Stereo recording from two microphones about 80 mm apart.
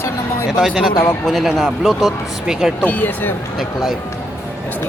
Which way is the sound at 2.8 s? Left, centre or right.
Left.